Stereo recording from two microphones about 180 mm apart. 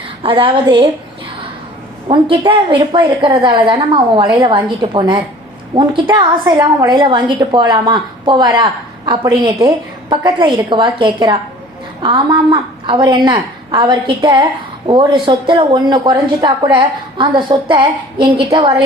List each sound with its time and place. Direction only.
0.2 s speech: 30° right (ahead or behind)
2.0 s a woman's voice: 30° right (ahead or behind)